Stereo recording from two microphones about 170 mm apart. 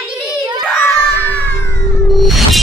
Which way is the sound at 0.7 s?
10° left (ahead or behind).